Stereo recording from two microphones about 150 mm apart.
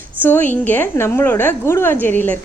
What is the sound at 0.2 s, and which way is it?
A woman's voice, 15° left (ahead or behind).